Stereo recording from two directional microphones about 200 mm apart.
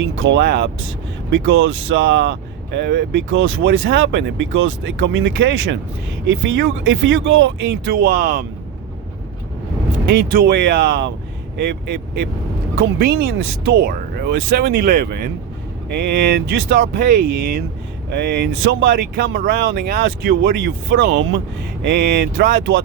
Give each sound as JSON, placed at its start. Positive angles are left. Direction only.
{"t": 0.2, "sound": "speech", "side_deg": -60}
{"t": 10.1, "sound": "speech", "side_deg": -55}